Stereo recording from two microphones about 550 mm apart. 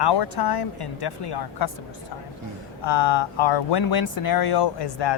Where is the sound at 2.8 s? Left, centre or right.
Left.